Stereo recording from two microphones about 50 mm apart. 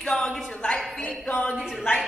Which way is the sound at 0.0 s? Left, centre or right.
Centre.